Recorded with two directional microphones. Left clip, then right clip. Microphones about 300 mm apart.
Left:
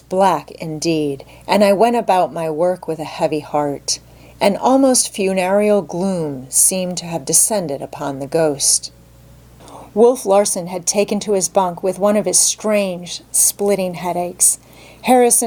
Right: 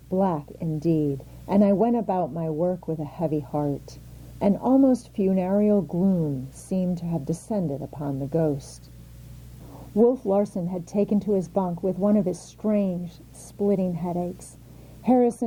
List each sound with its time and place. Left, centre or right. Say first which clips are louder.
0.2 s a woman's voice: left 12 dB; centre
6.5 s a woman's voice: left 11 dB; centre
7.8 s a woman's voice: left 8 dB; centre
9.7 s a sound: left 8 dB; left
10.3 s a woman's voice: left 10 dB; centre